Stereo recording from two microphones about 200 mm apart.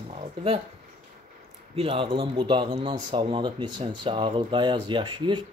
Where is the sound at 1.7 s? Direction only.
25° right (ahead or behind).